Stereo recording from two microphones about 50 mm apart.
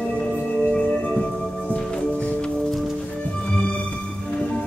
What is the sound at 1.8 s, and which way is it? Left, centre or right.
Music, centre.